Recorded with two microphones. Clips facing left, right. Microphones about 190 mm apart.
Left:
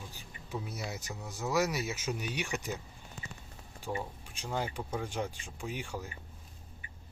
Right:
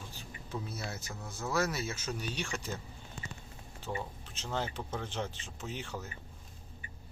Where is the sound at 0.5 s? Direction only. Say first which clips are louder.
Left 1 dB; 15° left (ahead or behind).